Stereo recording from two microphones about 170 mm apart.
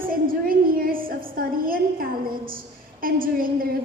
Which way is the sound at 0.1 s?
55° right (ahead or behind).